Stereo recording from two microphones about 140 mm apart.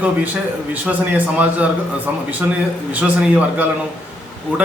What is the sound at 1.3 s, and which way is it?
A man's voice, 10° right (ahead or behind).